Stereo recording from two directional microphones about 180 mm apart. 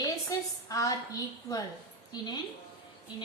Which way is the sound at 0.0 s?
20° left (ahead or behind).